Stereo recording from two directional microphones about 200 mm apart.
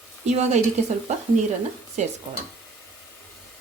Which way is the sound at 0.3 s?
35° right (ahead or behind).